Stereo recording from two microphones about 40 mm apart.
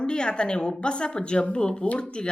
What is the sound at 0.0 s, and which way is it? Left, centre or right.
A woman's voice, left.